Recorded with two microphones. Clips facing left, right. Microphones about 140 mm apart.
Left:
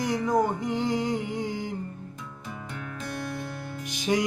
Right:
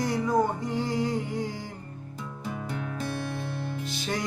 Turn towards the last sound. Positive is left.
turn(degrees=15)  # may be behind; listen again after turning